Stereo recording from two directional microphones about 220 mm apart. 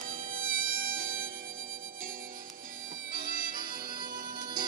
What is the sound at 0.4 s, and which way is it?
Music, 65° right (ahead or behind).